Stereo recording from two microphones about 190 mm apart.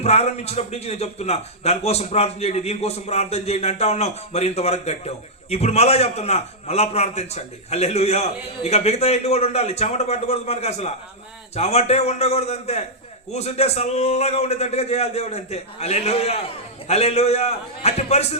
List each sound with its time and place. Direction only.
0.0 s a man's voice: 35° left (ahead or behind)